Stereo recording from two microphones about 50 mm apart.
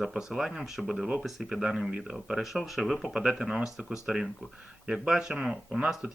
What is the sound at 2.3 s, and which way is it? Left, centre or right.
Speech, centre.